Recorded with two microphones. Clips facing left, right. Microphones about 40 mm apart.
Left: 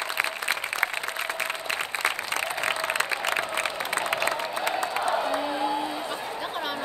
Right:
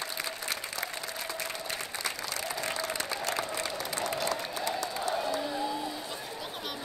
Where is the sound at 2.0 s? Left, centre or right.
Left.